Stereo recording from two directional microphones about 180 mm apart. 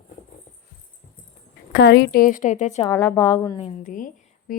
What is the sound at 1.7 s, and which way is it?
A woman's voice, 70° left (ahead or behind).